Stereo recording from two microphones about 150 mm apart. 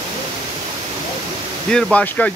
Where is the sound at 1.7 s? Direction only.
10° left (ahead or behind).